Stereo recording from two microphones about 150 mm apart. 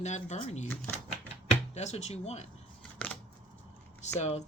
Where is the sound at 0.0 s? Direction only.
50° left (ahead or behind).